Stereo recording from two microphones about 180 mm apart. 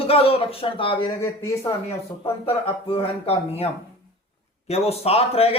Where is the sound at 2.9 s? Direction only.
35° left (ahead or behind).